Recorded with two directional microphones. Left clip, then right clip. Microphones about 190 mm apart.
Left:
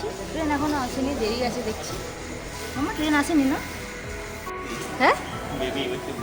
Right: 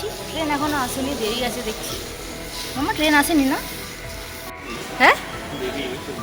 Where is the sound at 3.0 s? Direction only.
25° right (ahead or behind).